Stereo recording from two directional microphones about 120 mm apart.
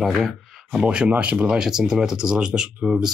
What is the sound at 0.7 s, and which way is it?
Speech, 10° right (ahead or behind).